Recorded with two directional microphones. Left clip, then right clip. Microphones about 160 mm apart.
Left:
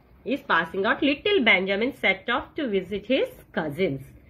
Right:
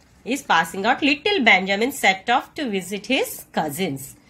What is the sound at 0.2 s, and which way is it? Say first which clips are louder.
A woman's voice: right 4 dB; 15° right (ahead or behind).